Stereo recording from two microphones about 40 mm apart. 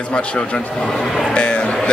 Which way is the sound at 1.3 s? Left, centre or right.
Left.